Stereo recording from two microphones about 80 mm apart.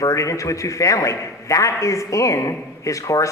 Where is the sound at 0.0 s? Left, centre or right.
Left.